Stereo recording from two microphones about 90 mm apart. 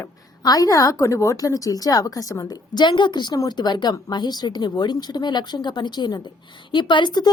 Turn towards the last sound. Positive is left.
turn(degrees=55)  # may be behind; listen again after turning